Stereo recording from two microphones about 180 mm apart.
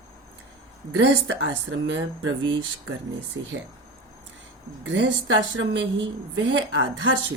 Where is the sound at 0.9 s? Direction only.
90° right.